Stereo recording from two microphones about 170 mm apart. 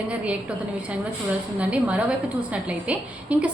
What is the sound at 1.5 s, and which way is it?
A woman's voice, 10° right (ahead or behind).